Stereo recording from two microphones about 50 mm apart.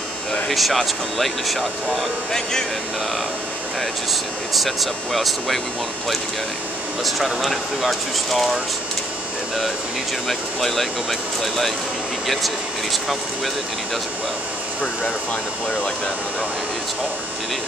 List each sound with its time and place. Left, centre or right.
0.5 s speech: centre
4.1 s speech: centre
7.1 s speech: centre
10.2 s speech: centre